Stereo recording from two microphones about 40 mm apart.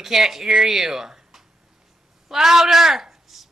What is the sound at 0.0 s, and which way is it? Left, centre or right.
A woman's voice, centre.